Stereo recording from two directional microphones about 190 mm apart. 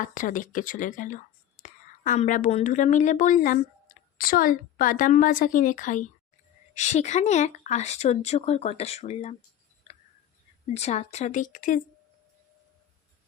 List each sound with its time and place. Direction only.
0.0 s a woman's voice: 45° left (ahead or behind)
9.9 s tick: 35° left (ahead or behind)
10.8 s speech: 35° left (ahead or behind)